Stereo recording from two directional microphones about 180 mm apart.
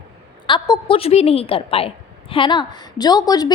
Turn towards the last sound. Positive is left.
turn(degrees=20)  # may be behind; listen again after turning